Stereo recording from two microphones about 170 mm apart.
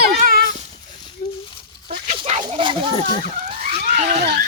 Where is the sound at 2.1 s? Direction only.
40° right (ahead or behind).